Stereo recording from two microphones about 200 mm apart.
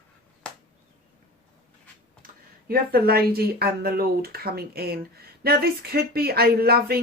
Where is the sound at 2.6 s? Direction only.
50° right (ahead or behind).